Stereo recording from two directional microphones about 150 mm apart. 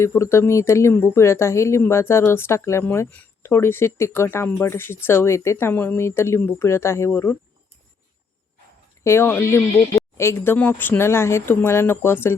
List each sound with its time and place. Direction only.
0.0 s speech: 20° left (ahead or behind)
9.0 s speech: 15° left (ahead or behind)